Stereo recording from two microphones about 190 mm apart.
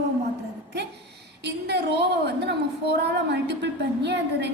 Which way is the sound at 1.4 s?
60° right (ahead or behind).